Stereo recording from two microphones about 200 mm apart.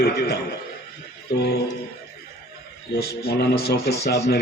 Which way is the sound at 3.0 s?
50° left (ahead or behind).